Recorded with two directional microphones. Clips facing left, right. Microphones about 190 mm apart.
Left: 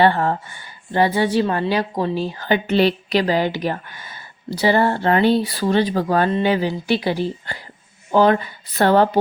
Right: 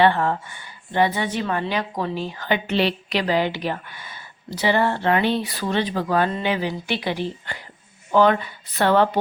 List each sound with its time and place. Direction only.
0.0 s a woman's voice: 40° left (ahead or behind)